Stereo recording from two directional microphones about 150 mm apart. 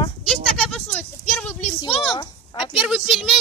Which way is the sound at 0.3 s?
Centre (ahead or behind).